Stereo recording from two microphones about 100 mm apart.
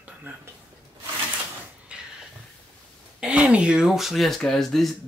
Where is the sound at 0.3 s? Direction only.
20° right (ahead or behind).